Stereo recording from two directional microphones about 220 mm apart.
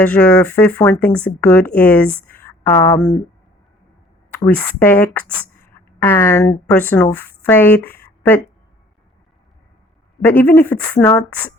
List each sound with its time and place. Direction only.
0.0 s speech: 5° left (ahead or behind)
4.4 s speech: 5° left (ahead or behind)
10.2 s speech: 10° left (ahead or behind)